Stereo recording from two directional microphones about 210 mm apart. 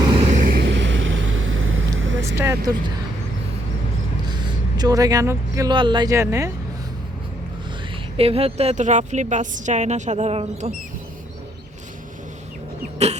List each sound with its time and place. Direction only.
0.0 s vehicle: 20° right (ahead or behind)
0.3 s vehicle: 40° right (ahead or behind); by 2.3 s 65° right (ahead or behind)
2.3 s vehicle: 15° right (ahead or behind)
4.3 s speech: 20° right (ahead or behind)
8.1 s a woman's voice: 30° right (ahead or behind)
13.0 s a woman's voice: 30° right (ahead or behind)